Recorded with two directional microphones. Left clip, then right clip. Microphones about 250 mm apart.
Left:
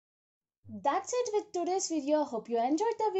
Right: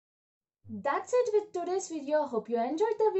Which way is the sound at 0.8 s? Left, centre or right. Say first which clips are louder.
Right 2 dB; left.